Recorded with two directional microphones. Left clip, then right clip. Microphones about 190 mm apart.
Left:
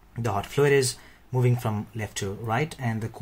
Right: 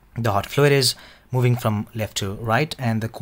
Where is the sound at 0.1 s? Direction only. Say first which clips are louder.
Right 6 dB; 45° right (ahead or behind).